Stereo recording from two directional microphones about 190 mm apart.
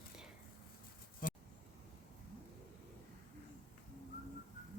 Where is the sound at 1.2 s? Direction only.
45° left (ahead or behind).